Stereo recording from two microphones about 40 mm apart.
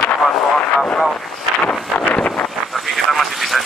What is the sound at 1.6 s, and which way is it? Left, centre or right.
Wind noise, left.